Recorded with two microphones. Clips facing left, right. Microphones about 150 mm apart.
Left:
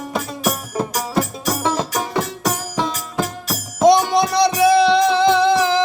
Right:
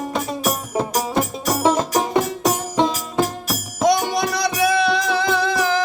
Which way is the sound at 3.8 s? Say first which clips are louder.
Left 5 dB; 25° left (ahead or behind).